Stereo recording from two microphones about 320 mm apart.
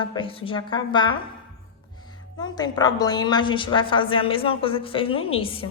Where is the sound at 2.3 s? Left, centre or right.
Centre.